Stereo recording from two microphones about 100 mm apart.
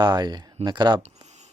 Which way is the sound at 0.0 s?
45° right (ahead or behind).